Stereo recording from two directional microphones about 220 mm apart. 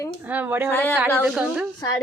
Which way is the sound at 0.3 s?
10° right (ahead or behind).